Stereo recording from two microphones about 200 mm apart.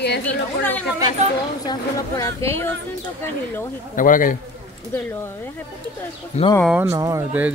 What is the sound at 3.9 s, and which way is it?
Speech, 40° left (ahead or behind).